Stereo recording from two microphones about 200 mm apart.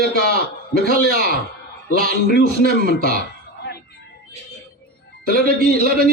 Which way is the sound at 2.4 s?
45° right (ahead or behind).